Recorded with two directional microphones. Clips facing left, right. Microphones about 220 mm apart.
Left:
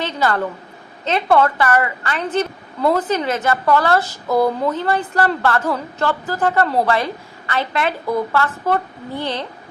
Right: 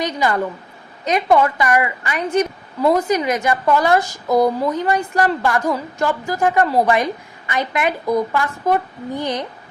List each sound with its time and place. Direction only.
0.0 s a woman's voice: 15° right (ahead or behind)